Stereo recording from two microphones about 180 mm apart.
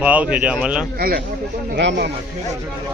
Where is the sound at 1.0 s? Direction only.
55° right (ahead or behind).